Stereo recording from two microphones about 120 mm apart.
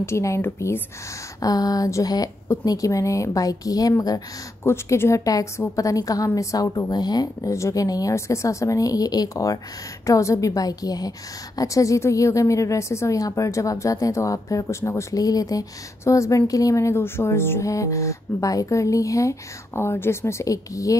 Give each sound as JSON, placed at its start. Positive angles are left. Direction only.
{"t": 0.0, "sound": "a woman's voice", "side_deg": 25}
{"t": 1.4, "sound": "a woman's voice", "side_deg": 30}